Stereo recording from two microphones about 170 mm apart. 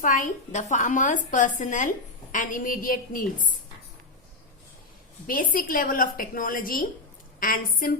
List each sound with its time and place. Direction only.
0.0 s a woman's voice: 50° left (ahead or behind)
5.2 s a woman's voice: 55° left (ahead or behind)